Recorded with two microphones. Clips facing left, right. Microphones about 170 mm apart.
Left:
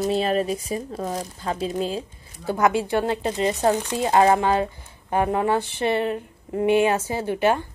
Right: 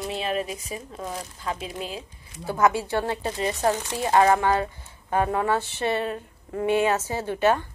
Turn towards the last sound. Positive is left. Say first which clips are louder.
# left 1 dB
turn(degrees=15)  # may be behind; listen again after turning